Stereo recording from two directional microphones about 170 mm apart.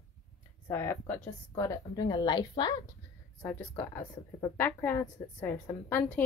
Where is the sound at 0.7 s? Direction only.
15° left (ahead or behind).